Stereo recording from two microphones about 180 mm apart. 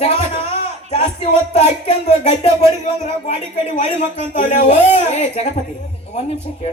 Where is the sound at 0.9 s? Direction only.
35° left (ahead or behind).